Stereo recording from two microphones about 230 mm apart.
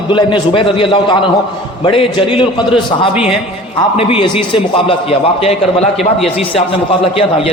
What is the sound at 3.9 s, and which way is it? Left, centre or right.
A man's voice, left.